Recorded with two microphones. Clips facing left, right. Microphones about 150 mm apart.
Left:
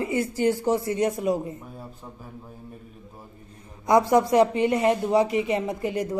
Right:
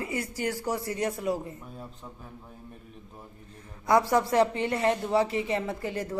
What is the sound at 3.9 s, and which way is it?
A woman's voice, 20° left (ahead or behind).